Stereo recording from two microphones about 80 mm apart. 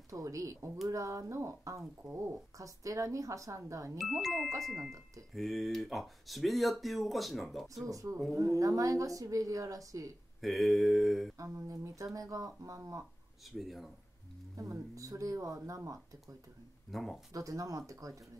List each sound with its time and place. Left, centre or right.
0.1 s speech: right
4.2 s speech: centre
7.6 s speech: right
10.4 s speech: centre
11.3 s speech: right
13.5 s speech: centre
14.6 s speech: right
16.9 s speech: centre
17.3 s speech: right